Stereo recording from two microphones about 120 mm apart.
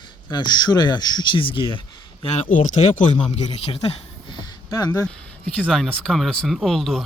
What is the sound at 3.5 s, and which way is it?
Speech, 55° left (ahead or behind).